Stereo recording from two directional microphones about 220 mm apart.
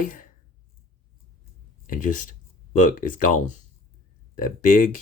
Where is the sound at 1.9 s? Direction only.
35° left (ahead or behind).